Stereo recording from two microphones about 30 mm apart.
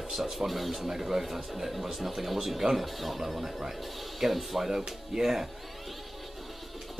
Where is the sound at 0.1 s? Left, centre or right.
Centre.